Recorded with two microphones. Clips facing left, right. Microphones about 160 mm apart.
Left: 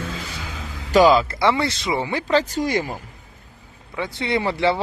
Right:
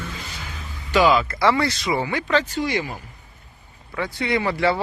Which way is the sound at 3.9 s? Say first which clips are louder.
Even; 20° left (ahead or behind).